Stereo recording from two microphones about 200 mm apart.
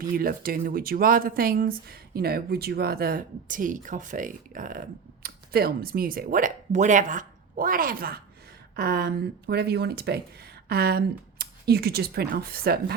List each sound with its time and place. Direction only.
0.0 s speech: 45° right (ahead or behind)